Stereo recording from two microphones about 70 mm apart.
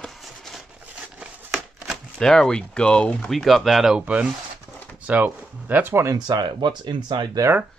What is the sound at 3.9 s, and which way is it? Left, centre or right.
Speech, centre.